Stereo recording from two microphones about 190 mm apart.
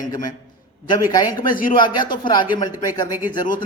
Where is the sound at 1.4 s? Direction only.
45° left (ahead or behind).